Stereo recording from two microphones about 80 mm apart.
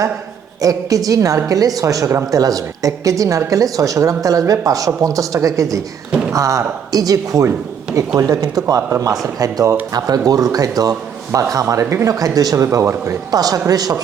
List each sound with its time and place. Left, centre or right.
0.6 s a woman's voice: right